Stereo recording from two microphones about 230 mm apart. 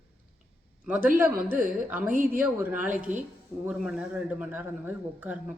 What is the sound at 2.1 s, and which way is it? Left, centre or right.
Speech, right.